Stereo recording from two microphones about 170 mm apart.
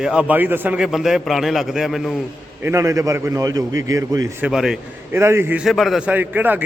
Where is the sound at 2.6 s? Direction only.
20° right (ahead or behind).